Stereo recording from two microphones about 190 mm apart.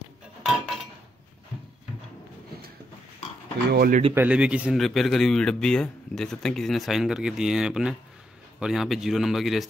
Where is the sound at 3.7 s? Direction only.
50° right (ahead or behind).